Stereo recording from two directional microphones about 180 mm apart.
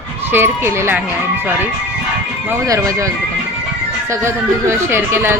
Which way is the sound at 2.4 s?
15° right (ahead or behind).